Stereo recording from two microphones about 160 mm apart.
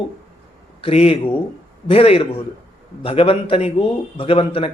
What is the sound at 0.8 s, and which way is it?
Speech, 40° left (ahead or behind).